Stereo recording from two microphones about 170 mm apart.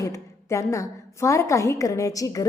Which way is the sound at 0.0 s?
20° left (ahead or behind).